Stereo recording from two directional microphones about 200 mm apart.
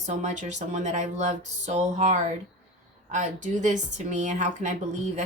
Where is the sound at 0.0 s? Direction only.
35° right (ahead or behind).